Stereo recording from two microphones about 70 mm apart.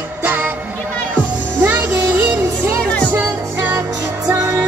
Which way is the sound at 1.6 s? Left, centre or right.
Right.